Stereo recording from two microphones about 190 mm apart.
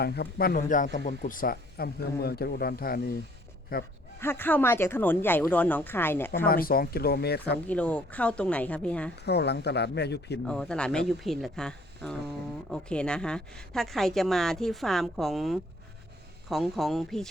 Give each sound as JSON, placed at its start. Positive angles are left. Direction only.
{"t": 0.0, "sound": "speech", "side_deg": 55}
{"t": 4.2, "sound": "speech", "side_deg": 10}
{"t": 6.5, "sound": "speech", "side_deg": 50}
{"t": 7.7, "sound": "speech", "side_deg": 5}
{"t": 9.2, "sound": "speech", "side_deg": 60}
{"t": 10.4, "sound": "a woman's voice", "side_deg": 5}